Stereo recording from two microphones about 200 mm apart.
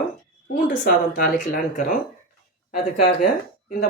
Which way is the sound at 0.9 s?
45° left (ahead or behind).